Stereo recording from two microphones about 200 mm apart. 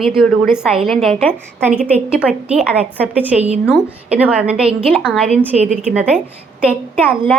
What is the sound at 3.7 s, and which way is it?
A woman's voice, 5° right (ahead or behind).